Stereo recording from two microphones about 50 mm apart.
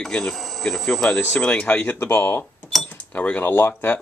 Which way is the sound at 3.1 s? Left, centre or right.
Left.